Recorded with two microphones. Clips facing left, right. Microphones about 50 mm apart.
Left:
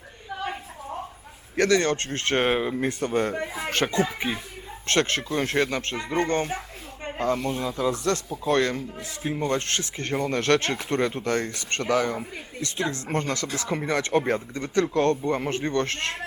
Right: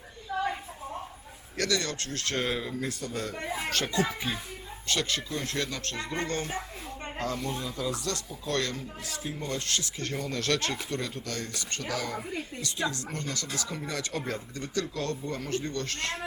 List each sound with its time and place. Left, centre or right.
1.5 s speech: left
3.4 s speech: centre
3.7 s speech: left